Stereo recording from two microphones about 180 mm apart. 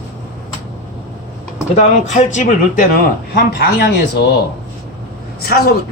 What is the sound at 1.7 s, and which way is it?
Speech, 40° left (ahead or behind).